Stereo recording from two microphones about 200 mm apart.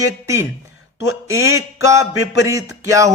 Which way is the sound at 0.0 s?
15° right (ahead or behind).